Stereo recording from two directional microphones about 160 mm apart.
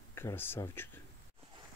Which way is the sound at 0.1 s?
15° left (ahead or behind).